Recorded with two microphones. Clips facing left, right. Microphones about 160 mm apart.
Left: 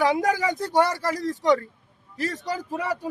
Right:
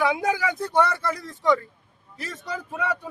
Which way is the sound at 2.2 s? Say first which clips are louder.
Left 5 dB; 70° left (ahead or behind).